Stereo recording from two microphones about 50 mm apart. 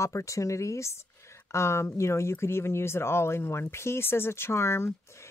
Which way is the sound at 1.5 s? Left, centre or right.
Left.